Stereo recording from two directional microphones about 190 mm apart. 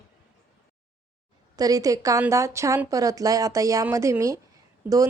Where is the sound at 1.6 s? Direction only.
20° right (ahead or behind).